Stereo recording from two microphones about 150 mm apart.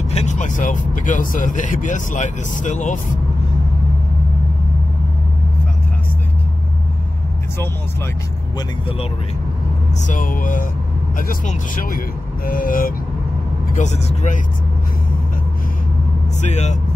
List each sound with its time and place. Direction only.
0.1 s speech: 50° left (ahead or behind)
10.0 s speech: 65° left (ahead or behind)
13.7 s speech: 50° left (ahead or behind)
16.3 s speech: 50° left (ahead or behind)